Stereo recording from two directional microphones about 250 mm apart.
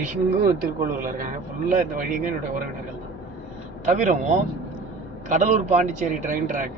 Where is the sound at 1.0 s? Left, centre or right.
Right.